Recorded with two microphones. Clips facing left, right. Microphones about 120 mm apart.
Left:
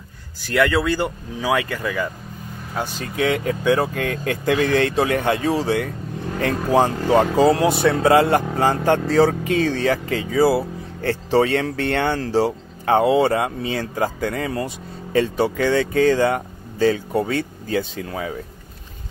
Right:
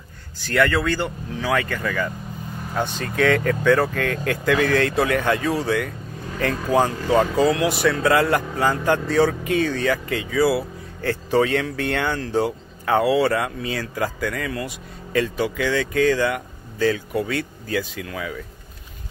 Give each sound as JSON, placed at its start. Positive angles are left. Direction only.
{"t": 0.5, "sound": "speech", "side_deg": 10}